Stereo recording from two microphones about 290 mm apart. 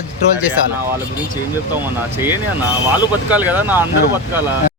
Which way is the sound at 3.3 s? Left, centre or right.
Centre.